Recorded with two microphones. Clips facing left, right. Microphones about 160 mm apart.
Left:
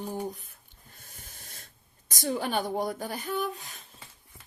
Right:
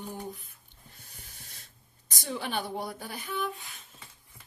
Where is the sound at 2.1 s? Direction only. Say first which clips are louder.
Left 5 dB; 45° left (ahead or behind).